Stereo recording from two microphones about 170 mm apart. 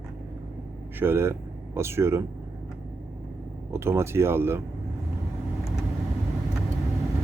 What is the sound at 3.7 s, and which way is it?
Speech, 15° right (ahead or behind).